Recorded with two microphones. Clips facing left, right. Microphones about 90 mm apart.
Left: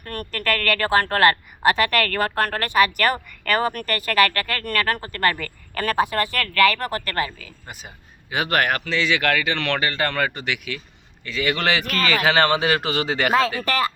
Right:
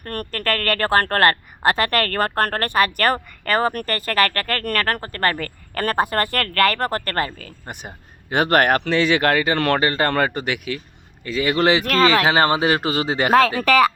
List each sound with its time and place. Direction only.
0.0 s a woman's voice: 45° right (ahead or behind)
13.6 s speech: 80° right